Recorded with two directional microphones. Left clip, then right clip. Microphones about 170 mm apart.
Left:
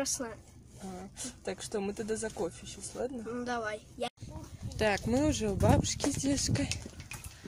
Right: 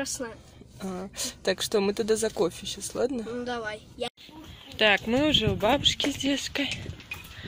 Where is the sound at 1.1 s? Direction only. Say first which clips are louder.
Right 12 dB; 60° right (ahead or behind).